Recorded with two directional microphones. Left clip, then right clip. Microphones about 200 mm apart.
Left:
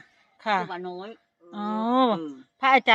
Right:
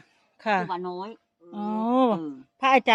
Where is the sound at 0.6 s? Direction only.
55° right (ahead or behind).